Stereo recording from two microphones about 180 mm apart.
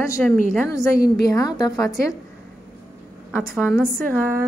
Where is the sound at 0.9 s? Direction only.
55° left (ahead or behind).